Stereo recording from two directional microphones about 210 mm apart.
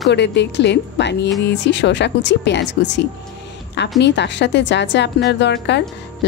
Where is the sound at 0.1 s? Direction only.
55° left (ahead or behind).